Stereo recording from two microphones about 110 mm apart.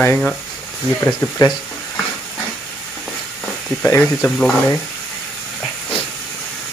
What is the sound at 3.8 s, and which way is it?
Speech, 20° left (ahead or behind).